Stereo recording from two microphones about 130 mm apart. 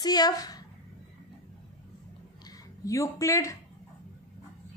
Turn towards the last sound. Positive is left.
turn(degrees=25)  # may be behind; listen again after turning